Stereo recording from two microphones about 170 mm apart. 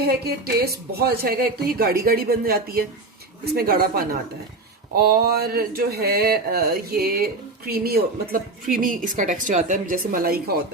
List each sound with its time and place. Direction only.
0.0 s speech: 65° right (ahead or behind)